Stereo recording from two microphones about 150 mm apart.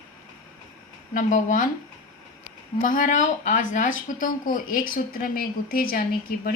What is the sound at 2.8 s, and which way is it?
Speech, 60° left (ahead or behind).